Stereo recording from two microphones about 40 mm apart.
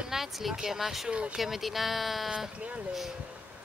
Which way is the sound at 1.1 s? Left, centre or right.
Right.